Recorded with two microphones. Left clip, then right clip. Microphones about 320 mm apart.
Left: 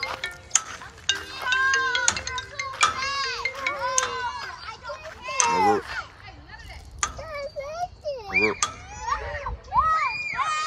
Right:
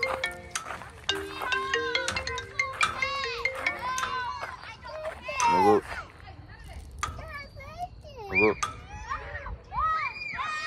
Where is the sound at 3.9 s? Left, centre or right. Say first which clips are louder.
Left 4 dB; centre.